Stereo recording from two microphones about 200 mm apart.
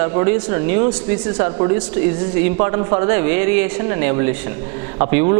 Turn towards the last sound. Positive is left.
turn(degrees=-25)  # may be behind; listen again after turning